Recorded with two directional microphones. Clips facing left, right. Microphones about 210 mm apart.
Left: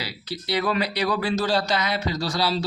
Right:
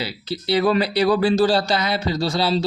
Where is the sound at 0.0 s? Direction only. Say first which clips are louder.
Right 6 dB; 30° right (ahead or behind).